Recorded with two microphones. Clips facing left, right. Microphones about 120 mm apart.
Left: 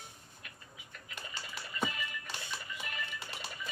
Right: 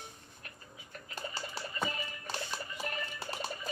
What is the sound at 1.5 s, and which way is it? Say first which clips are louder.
Music: left 1 dB; 35° right (ahead or behind).